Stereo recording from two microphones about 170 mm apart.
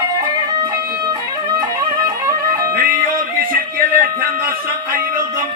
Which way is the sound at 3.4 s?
60° right (ahead or behind).